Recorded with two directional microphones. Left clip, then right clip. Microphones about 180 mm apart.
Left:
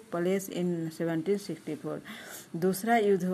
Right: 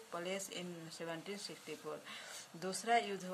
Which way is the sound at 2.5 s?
40° left (ahead or behind).